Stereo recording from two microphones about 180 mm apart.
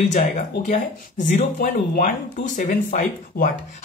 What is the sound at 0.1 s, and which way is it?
Speech, 40° left (ahead or behind).